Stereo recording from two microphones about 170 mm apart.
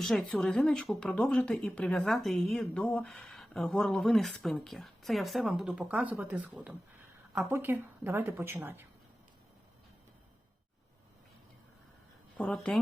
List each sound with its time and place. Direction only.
0.0 s a woman's voice: centre (ahead or behind)
12.4 s a woman's voice: 5° left (ahead or behind)